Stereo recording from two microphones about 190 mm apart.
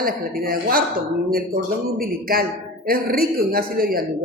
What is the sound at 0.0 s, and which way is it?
Speech, 50° right (ahead or behind).